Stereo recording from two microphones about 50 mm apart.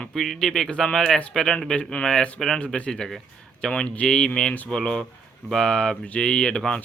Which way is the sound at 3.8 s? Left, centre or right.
Left.